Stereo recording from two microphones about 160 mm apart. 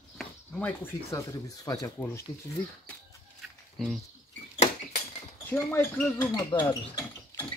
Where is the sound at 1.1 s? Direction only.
20° left (ahead or behind).